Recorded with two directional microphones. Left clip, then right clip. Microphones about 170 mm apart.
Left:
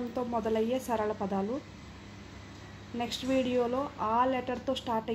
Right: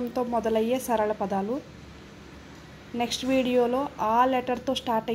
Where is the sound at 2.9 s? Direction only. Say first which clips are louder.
Right 5 dB; 20° right (ahead or behind).